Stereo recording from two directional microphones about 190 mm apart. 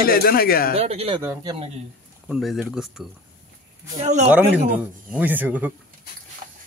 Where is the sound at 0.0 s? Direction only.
50° left (ahead or behind).